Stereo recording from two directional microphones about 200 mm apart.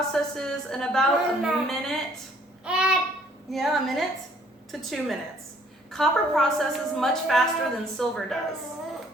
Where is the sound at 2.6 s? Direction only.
5° right (ahead or behind).